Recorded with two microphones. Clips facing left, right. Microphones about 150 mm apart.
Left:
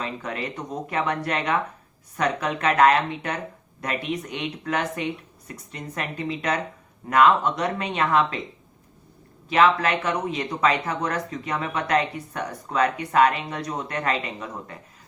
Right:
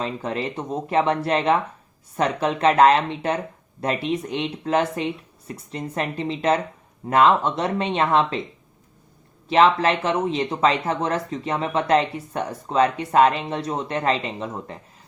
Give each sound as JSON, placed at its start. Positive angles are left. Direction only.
{"t": 0.0, "sound": "speech", "side_deg": -30}
{"t": 9.5, "sound": "speech", "side_deg": -30}